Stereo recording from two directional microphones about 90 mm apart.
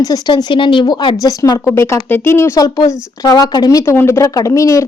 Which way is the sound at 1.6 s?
30° left (ahead or behind).